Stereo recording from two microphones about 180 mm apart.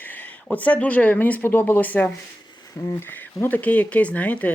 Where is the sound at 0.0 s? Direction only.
10° left (ahead or behind).